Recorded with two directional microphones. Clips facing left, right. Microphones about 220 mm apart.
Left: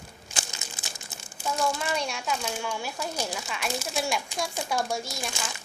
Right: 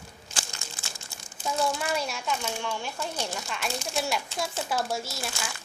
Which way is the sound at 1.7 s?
5° right (ahead or behind).